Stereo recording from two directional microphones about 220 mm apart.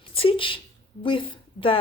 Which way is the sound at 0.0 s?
25° left (ahead or behind).